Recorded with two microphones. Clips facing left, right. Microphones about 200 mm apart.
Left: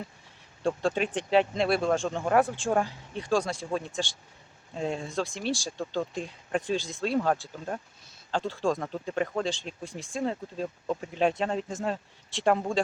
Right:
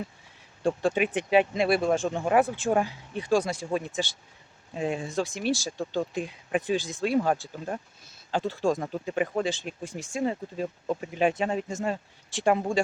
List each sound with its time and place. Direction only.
0.6 s speech: 15° right (ahead or behind)